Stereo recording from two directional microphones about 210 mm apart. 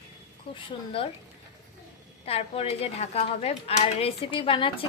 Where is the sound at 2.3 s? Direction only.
30° left (ahead or behind).